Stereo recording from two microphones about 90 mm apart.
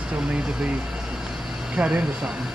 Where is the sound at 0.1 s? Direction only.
10° right (ahead or behind).